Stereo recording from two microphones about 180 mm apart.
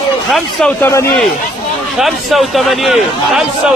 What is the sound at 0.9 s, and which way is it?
Speech, 15° left (ahead or behind).